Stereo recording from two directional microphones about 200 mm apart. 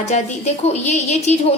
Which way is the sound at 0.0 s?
35° left (ahead or behind).